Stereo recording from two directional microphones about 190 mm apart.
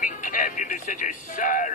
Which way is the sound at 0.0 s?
45° left (ahead or behind).